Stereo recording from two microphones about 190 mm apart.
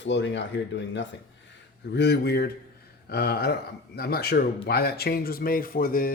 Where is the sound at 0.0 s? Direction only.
70° left (ahead or behind).